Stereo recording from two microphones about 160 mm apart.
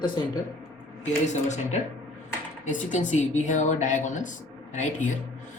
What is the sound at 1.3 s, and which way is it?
Speech, 45° left (ahead or behind).